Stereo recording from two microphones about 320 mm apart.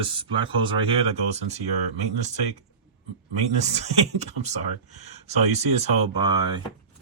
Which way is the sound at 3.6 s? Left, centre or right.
Right.